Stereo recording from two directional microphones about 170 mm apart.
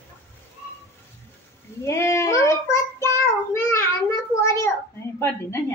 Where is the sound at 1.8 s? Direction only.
15° left (ahead or behind).